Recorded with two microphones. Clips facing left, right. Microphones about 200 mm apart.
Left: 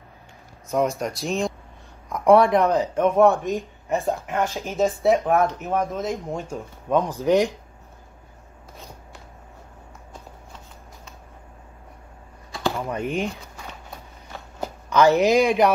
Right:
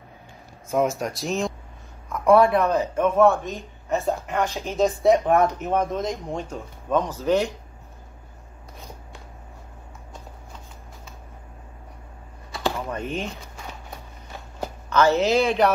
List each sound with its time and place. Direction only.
0.7 s speech: centre (ahead or behind)
2.0 s speech: 15° left (ahead or behind)
12.9 s speech: 10° left (ahead or behind)
14.9 s speech: 15° left (ahead or behind)